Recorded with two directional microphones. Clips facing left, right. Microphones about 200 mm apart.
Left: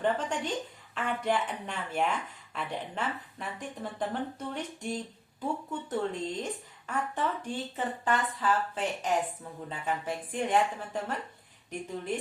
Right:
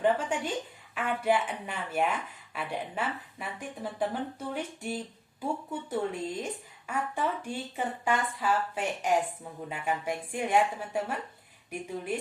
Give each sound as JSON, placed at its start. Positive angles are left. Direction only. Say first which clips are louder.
{"t": 0.0, "sound": "speech", "louder": "right 2 dB", "side_deg": -10}